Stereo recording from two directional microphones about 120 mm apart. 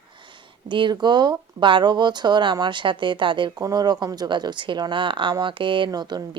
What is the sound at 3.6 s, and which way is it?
Speech, 30° right (ahead or behind).